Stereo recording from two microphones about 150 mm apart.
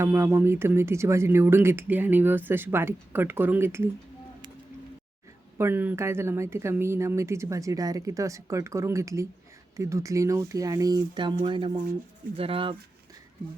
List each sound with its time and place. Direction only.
0.0 s speech: 15° right (ahead or behind)
5.5 s speech: 15° right (ahead or behind); by 12.7 s 35° right (ahead or behind)